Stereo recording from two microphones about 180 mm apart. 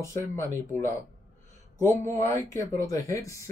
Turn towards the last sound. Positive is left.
turn(degrees=15)  # may be behind; listen again after turning